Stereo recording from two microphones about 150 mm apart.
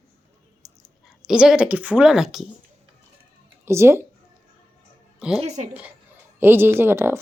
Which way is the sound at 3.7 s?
15° right (ahead or behind).